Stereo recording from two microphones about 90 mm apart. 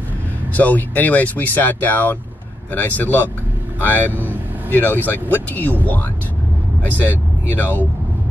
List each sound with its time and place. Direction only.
0.5 s speech: 20° left (ahead or behind)
4.1 s vehicle: 20° right (ahead or behind)
4.6 s speech: 20° left (ahead or behind)